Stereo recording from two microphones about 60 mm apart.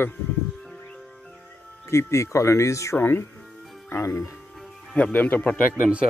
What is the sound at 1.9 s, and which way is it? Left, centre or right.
Speech, left.